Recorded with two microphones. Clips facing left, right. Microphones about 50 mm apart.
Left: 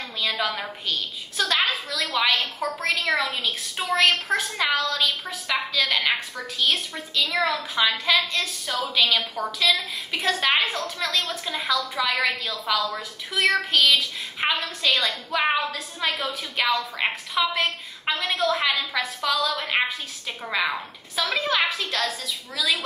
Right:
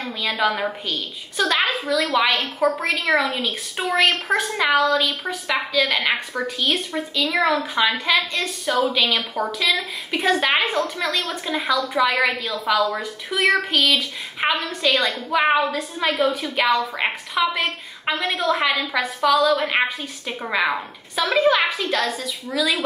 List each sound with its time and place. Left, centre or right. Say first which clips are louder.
0.3 s a woman's voice: right 8 dB; centre
7.5 s a woman's voice: right 4 dB; right
7.9 s a woman's voice: right 2 dB; centre
10.4 s a woman's voice: right 3 dB; centre